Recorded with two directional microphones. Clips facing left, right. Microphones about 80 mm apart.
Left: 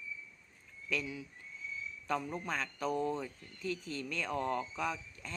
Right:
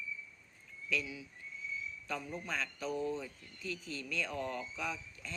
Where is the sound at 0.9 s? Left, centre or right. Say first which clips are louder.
Even; left.